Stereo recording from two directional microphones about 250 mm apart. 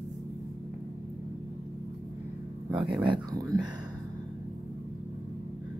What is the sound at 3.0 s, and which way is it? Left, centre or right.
Speech, centre.